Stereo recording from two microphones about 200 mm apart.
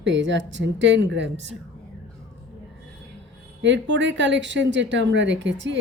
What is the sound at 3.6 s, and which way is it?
Speech, 65° right (ahead or behind).